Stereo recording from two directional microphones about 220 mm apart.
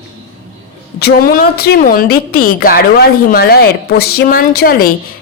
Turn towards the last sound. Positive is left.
turn(degrees=40)  # may be behind; listen again after turning